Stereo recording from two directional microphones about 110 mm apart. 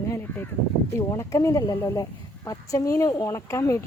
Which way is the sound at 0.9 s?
30° left (ahead or behind).